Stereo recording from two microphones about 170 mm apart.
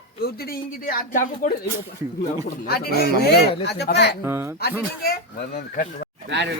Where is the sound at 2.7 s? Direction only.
65° left (ahead or behind).